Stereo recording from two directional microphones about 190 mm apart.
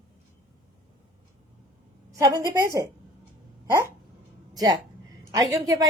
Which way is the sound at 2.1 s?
15° right (ahead or behind).